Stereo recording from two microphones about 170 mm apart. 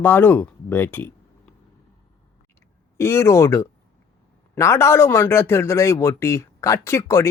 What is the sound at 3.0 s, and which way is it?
Speech, 15° left (ahead or behind).